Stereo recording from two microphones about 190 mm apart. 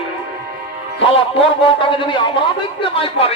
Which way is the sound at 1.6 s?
25° left (ahead or behind).